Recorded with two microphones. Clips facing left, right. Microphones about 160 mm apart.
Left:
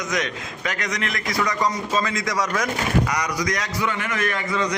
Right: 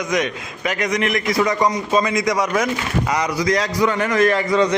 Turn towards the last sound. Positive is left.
turn(degrees=-35)  # may be behind; listen again after turning